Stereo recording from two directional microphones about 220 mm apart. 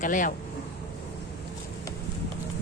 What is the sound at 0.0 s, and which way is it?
Speech, 35° left (ahead or behind).